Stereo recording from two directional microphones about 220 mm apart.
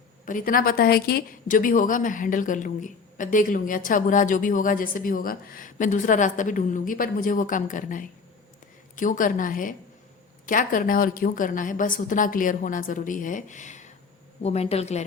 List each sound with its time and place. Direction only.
0.3 s a woman's voice: 40° left (ahead or behind)